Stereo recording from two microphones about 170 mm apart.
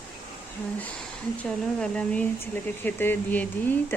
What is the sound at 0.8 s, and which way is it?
Speech, 5° left (ahead or behind).